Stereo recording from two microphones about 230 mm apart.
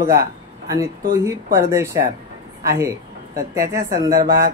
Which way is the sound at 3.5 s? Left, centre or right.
Centre.